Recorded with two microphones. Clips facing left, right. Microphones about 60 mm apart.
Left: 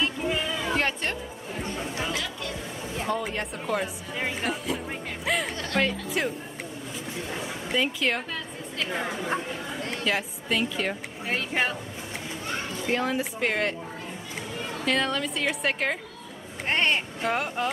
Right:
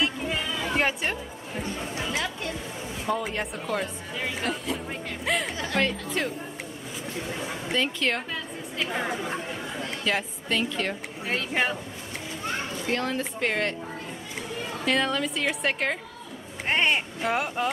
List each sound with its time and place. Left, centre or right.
0.7 s speech: centre
2.1 s speech: right
3.1 s a woman's voice: centre
4.4 s music: centre
5.8 s a woman's voice: centre
7.6 s a woman's voice: centre
12.8 s a woman's voice: centre
14.9 s a woman's voice: centre